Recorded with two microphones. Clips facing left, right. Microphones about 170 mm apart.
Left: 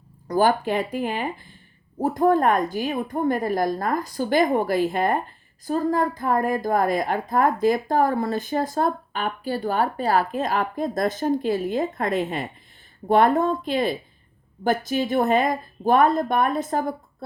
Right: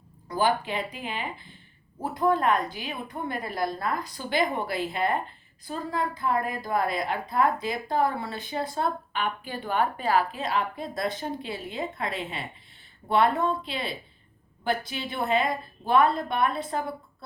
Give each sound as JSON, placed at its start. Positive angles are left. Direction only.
{"t": 0.3, "sound": "a woman's voice", "side_deg": 45}